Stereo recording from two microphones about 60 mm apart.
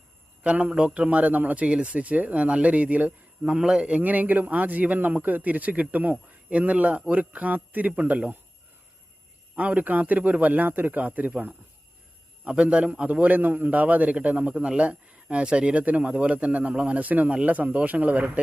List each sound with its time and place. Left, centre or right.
0.4 s a man's voice: centre
9.6 s a man's voice: right